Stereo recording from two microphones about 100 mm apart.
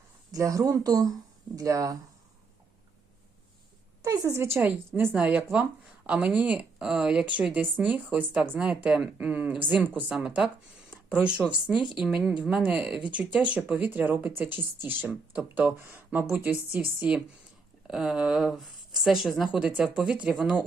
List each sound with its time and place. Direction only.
0.3 s speech: 35° right (ahead or behind)
4.0 s a woman's voice: 35° right (ahead or behind)
5.1 s a woman's voice: 15° right (ahead or behind)
17.8 s a woman's voice: 5° right (ahead or behind)